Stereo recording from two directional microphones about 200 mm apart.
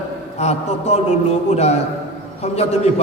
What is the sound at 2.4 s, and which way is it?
Speech, 35° left (ahead or behind).